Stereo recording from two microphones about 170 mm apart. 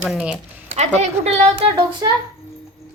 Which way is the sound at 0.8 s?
40° right (ahead or behind).